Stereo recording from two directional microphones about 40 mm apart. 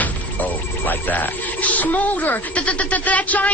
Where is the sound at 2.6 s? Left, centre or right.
Left.